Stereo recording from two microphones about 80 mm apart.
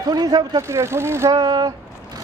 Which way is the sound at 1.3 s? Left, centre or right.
Right.